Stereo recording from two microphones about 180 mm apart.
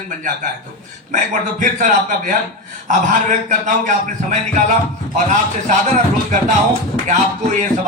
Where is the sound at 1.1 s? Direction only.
45° right (ahead or behind).